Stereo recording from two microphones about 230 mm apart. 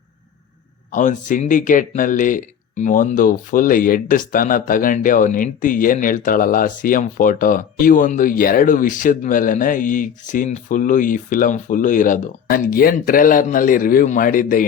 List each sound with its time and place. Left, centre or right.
0.9 s speech: left